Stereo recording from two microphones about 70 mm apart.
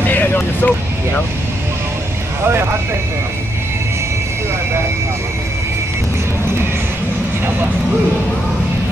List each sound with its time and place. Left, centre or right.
0.0 s vehicle: left